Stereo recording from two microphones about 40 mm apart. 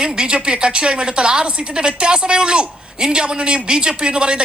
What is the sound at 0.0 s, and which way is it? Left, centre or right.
A man's voice, right.